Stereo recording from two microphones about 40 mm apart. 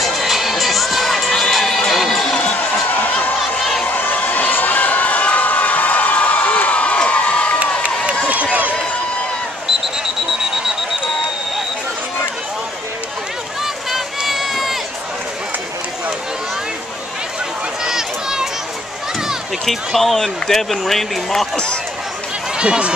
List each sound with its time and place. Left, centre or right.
0.0 s children shouting: centre
2.0 s music: centre
2.5 s a sound: left
3.5 s a sound: centre
3.9 s a sound: left
4.2 s crowd: left
8.3 s run: right
13.8 s run: centre
17.8 s run: centre
19.6 s speech: centre
22.6 s speech: right